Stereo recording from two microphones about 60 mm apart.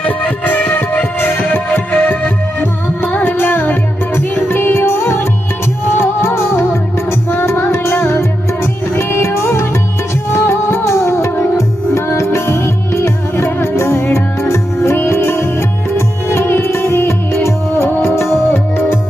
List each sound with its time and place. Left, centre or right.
0.0 s music: left